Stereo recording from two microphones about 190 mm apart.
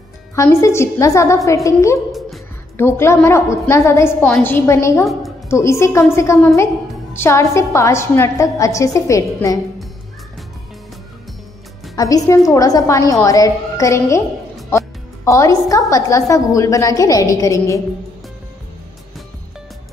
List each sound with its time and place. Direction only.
0.4 s a woman's voice: 15° left (ahead or behind)
11.9 s a woman's voice: 15° left (ahead or behind)
14.7 s music: 15° left (ahead or behind)
15.9 s a woman's voice: 15° left (ahead or behind)